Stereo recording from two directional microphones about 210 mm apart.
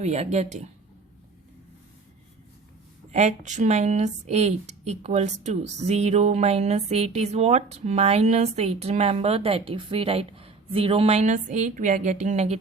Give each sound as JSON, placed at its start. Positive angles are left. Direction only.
{"t": 0.0, "sound": "a woman's voice", "side_deg": -30}
{"t": 3.1, "sound": "a woman's voice", "side_deg": -30}